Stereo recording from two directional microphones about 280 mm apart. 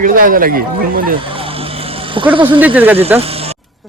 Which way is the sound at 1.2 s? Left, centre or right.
Centre.